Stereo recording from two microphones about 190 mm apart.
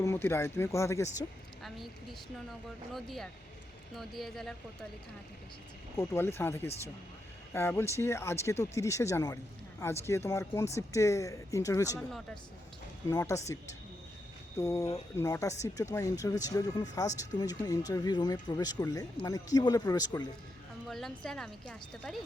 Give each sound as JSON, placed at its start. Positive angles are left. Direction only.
{"t": 0.0, "sound": "speech", "side_deg": 15}
{"t": 1.6, "sound": "speech", "side_deg": 0}
{"t": 6.0, "sound": "speech", "side_deg": 10}
{"t": 11.9, "sound": "speech", "side_deg": 0}
{"t": 13.1, "sound": "speech", "side_deg": 15}
{"t": 14.6, "sound": "speech", "side_deg": 15}
{"t": 20.8, "sound": "speech", "side_deg": 0}